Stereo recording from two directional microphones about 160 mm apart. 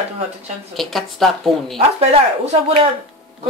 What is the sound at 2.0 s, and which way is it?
Speech, 40° right (ahead or behind).